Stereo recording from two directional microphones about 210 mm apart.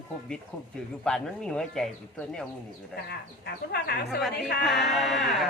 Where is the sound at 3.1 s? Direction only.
50° left (ahead or behind).